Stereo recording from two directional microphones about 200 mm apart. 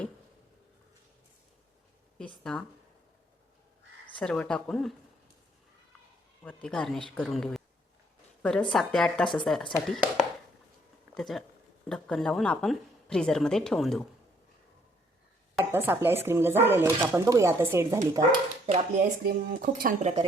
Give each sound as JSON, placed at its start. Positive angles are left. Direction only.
{"t": 2.1, "sound": "speech", "side_deg": 5}
{"t": 4.0, "sound": "speech", "side_deg": 5}
{"t": 6.4, "sound": "a woman's voice", "side_deg": 5}
{"t": 15.7, "sound": "speech", "side_deg": -10}
{"t": 18.6, "sound": "speech", "side_deg": -35}